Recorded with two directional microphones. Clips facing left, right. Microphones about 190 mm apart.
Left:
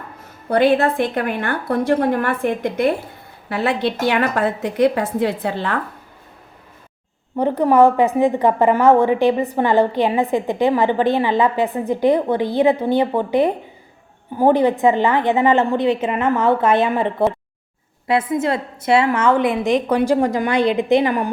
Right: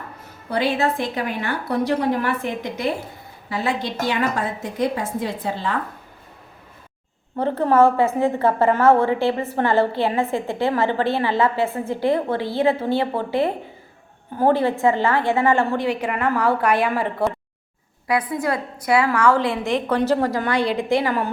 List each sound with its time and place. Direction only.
0.5 s a woman's voice: 55° left (ahead or behind)
7.3 s a woman's voice: 15° left (ahead or behind)